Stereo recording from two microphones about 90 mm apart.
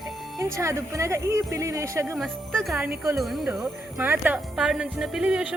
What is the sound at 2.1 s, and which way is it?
Speech, 5° left (ahead or behind).